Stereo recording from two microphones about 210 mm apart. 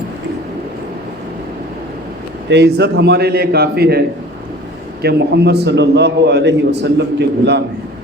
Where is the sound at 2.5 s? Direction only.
55° right (ahead or behind).